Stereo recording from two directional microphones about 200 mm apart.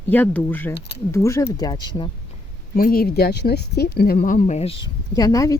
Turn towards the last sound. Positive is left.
turn(degrees=15)  # may be behind; listen again after turning